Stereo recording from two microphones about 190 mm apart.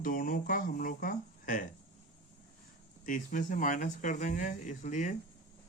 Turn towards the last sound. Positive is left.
turn(degrees=40)  # may be behind; listen again after turning